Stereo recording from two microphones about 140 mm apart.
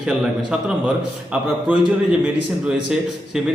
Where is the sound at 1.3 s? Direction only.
10° right (ahead or behind).